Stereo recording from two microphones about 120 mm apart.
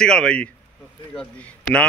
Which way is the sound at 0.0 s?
5° left (ahead or behind).